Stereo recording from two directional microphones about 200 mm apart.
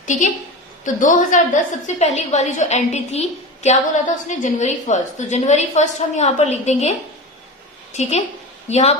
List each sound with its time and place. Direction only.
0.0 s a woman's voice: 40° left (ahead or behind)
8.7 s a woman's voice: 35° left (ahead or behind)